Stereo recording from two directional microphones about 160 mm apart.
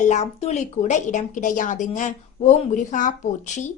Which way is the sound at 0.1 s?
45° left (ahead or behind).